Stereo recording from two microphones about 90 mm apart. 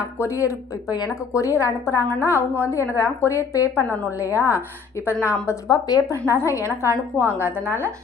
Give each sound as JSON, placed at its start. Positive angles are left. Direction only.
{"t": 0.2, "sound": "a woman's voice", "side_deg": 35}
{"t": 5.6, "sound": "a woman's voice", "side_deg": 45}
{"t": 7.2, "sound": "a woman's voice", "side_deg": -25}